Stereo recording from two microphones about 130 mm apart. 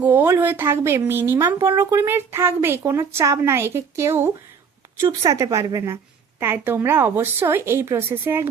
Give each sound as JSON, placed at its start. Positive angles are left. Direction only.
{"t": 0.0, "sound": "speech", "side_deg": -15}